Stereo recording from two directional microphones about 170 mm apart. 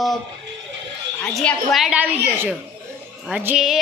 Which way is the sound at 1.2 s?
5° left (ahead or behind).